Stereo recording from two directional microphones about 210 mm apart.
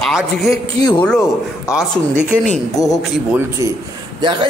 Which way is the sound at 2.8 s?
15° left (ahead or behind).